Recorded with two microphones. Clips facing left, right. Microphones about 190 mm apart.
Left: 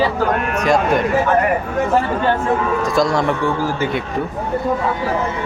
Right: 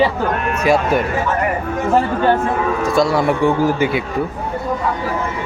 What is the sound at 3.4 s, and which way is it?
Speech, 20° right (ahead or behind).